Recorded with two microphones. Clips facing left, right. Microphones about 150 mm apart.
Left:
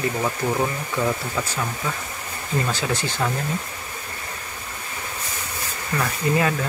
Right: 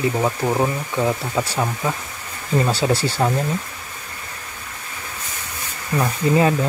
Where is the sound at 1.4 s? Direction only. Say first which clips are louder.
Right 5 dB; 25° right (ahead or behind).